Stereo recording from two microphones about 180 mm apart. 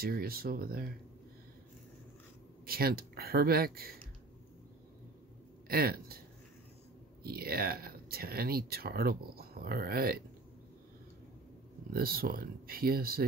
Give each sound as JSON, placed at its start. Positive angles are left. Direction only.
{"t": 0.0, "sound": "speech", "side_deg": -55}
{"t": 2.6, "sound": "speech", "side_deg": -55}
{"t": 5.7, "sound": "speech", "side_deg": -55}
{"t": 7.2, "sound": "speech", "side_deg": -55}
{"t": 11.9, "sound": "speech", "side_deg": -55}